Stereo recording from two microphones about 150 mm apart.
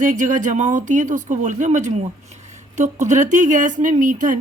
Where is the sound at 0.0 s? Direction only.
55° right (ahead or behind).